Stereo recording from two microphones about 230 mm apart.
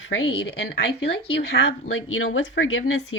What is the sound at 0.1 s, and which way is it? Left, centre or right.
Speech, left.